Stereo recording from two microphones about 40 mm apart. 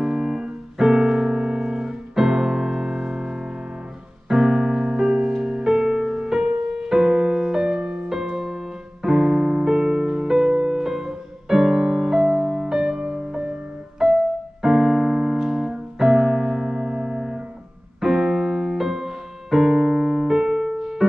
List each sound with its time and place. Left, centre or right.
0.0 s music: centre
8.1 s music: centre
13.0 s music: right
14.6 s piano: centre
18.0 s keyboard: centre
19.5 s piano: centre
20.6 s keyboard: centre